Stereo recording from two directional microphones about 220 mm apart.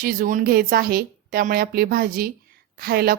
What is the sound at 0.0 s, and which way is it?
A woman's voice, 35° right (ahead or behind).